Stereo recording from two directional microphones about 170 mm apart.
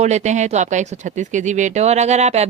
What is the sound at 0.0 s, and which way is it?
Speech, 40° right (ahead or behind).